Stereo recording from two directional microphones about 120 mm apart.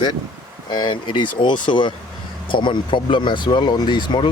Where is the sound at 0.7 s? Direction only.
40° left (ahead or behind).